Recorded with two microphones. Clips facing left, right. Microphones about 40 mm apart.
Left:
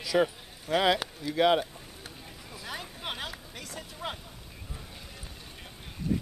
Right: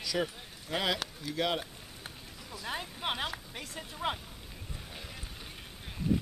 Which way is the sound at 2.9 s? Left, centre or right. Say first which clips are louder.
Right 2 dB; centre.